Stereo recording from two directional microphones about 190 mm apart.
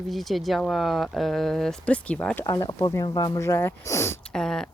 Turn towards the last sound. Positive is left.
turn(degrees=5)  # may be behind; listen again after turning